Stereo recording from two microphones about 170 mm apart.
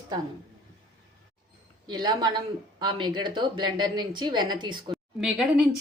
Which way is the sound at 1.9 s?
25° right (ahead or behind).